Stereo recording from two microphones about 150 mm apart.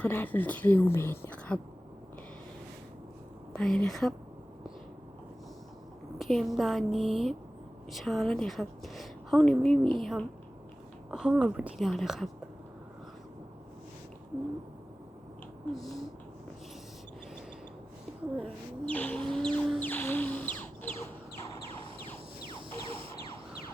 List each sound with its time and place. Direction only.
0.0 s a woman's voice: 10° left (ahead or behind)
3.5 s a woman's voice: 5° left (ahead or behind)
6.1 s a woman's voice: centre (ahead or behind)
15.7 s a woman's voice: centre (ahead or behind)
18.9 s a woman's voice: 10° left (ahead or behind)
19.9 s music: 10° left (ahead or behind)
22.4 s a sound: 35° right (ahead or behind)